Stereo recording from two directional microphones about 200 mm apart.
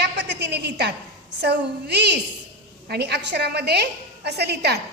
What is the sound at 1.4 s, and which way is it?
A woman's voice, 55° right (ahead or behind).